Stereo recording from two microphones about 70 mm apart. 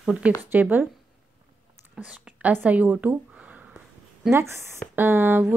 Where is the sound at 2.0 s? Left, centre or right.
Centre.